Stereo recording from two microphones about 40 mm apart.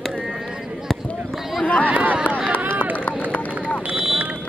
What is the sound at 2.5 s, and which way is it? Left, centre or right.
Run, right.